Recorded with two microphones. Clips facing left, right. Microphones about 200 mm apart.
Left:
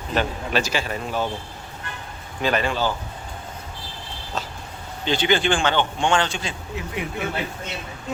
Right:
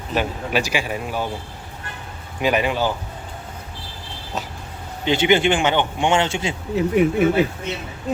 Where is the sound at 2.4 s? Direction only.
15° right (ahead or behind).